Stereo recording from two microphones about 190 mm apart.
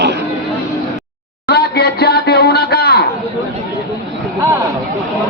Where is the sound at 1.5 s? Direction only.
60° left (ahead or behind).